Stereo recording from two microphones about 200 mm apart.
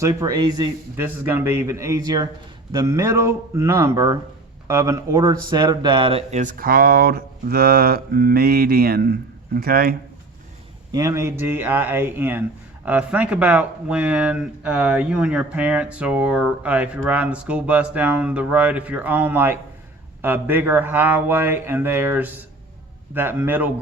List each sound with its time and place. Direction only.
0.0 s speech: 15° right (ahead or behind); by 10.0 s 50° right (ahead or behind)
10.9 s speech: 15° right (ahead or behind)